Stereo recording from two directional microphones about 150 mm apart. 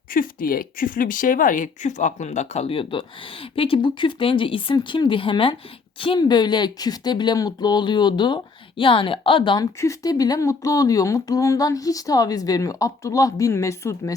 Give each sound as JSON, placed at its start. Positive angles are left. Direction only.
{"t": 0.1, "sound": "speech", "side_deg": 70}
{"t": 9.8, "sound": "speech", "side_deg": 20}